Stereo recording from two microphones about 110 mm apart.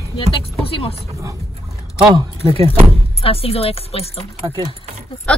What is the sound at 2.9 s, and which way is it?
Speech, 60° left (ahead or behind).